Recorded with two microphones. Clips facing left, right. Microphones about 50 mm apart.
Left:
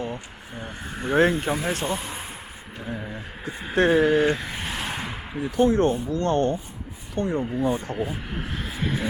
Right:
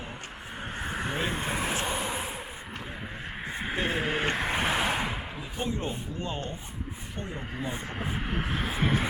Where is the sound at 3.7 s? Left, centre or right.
Left.